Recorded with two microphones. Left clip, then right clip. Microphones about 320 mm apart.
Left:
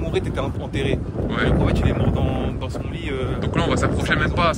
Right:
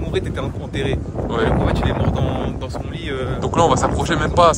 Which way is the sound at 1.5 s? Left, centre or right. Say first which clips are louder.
Right 2 dB; centre.